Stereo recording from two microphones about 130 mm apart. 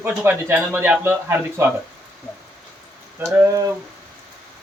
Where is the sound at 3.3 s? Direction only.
25° right (ahead or behind).